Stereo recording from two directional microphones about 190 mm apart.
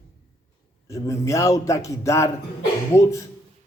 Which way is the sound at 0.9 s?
15° left (ahead or behind).